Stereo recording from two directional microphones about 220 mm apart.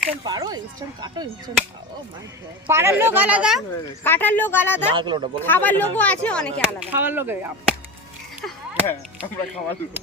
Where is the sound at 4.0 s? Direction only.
10° left (ahead or behind).